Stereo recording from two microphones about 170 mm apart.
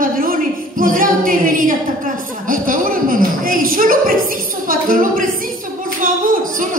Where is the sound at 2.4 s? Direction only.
55° right (ahead or behind).